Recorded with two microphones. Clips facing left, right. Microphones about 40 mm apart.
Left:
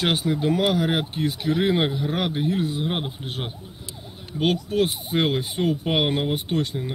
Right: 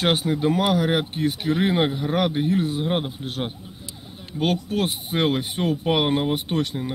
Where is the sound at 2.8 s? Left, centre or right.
Centre.